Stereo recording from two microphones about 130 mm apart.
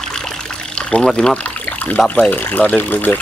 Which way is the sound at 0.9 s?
5° left (ahead or behind).